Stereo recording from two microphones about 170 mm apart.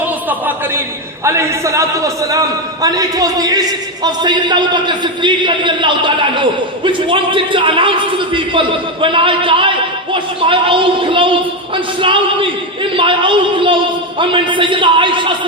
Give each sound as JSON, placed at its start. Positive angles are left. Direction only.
{"t": 0.3, "sound": "a man's voice", "side_deg": -10}